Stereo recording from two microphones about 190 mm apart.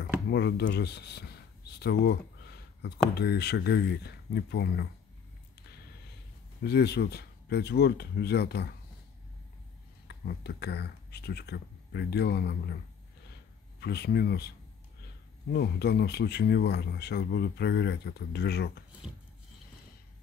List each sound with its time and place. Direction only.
0.3 s speech: 60° left (ahead or behind)
6.6 s speech: 60° left (ahead or behind)
10.0 s speech: 60° left (ahead or behind)
13.7 s speech: 60° left (ahead or behind)
15.5 s speech: 60° left (ahead or behind)